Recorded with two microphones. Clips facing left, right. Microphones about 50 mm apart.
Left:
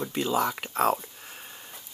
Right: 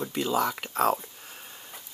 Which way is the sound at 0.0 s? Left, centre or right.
Centre.